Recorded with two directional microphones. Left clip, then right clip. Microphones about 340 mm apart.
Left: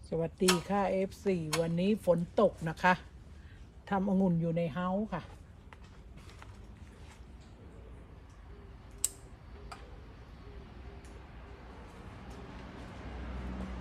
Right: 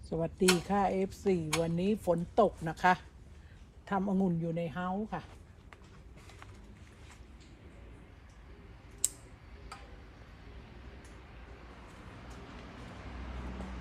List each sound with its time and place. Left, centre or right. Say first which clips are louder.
0.1 s speech: right 1 dB; centre